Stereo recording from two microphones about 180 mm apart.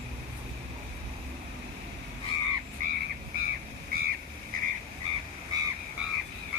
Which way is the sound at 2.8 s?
45° right (ahead or behind).